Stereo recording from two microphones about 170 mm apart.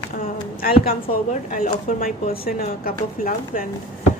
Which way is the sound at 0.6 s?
60° left (ahead or behind).